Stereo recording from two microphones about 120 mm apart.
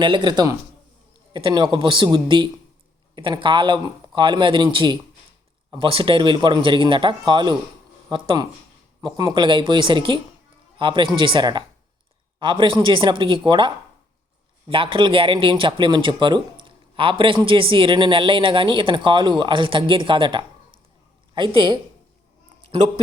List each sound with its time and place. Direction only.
0.0 s speech: 40° right (ahead or behind)